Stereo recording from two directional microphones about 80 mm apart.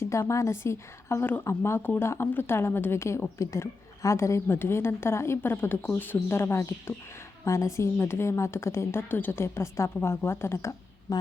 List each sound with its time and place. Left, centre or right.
0.0 s speech: left
11.1 s speech: left